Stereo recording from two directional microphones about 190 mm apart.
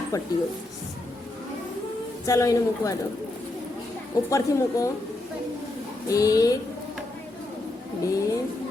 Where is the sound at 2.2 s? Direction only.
15° left (ahead or behind).